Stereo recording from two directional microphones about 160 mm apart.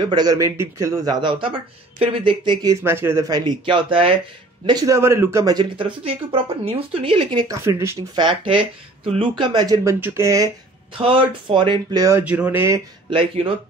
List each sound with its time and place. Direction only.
0.1 s speech: 25° right (ahead or behind)
2.8 s speech: 15° right (ahead or behind)
9.0 s speech: 35° right (ahead or behind)
11.0 s speech: 35° right (ahead or behind)
12.3 s speech: 10° right (ahead or behind)